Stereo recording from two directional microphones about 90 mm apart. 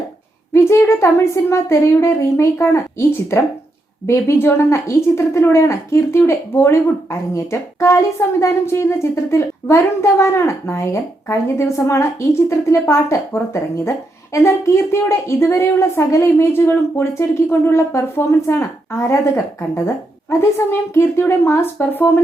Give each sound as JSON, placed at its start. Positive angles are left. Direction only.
{"t": 0.5, "sound": "speech", "side_deg": 30}
{"t": 4.0, "sound": "speech", "side_deg": 30}
{"t": 20.4, "sound": "a woman's voice", "side_deg": 30}